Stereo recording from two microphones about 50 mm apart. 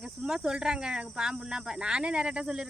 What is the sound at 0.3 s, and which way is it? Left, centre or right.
Speech, centre.